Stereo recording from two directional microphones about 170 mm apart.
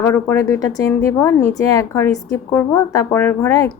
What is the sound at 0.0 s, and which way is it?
A woman's voice, 15° left (ahead or behind).